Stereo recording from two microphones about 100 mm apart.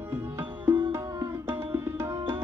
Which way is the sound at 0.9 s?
30° right (ahead or behind).